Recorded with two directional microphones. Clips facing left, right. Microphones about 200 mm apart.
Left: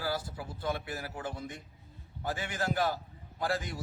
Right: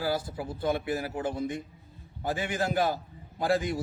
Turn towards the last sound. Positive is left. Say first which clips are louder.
# right 7 dB
turn(degrees=-15)  # may be behind; listen again after turning